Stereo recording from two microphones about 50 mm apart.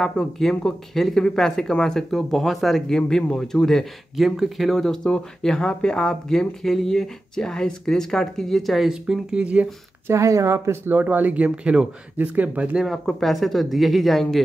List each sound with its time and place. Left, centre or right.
0.0 s speech: centre
4.2 s speech: centre
4.7 s speech: centre
9.0 s speech: centre
9.4 s speech: right
10.0 s speech: right
10.9 s speech: right
12.2 s speech: right
13.2 s speech: centre